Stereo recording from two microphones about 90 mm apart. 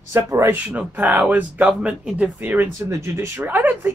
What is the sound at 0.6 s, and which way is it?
Speech, 15° right (ahead or behind).